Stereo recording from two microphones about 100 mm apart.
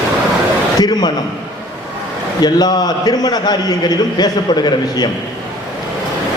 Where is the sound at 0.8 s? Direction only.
45° left (ahead or behind).